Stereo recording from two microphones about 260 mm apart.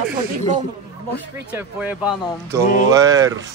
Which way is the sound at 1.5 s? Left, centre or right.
Centre.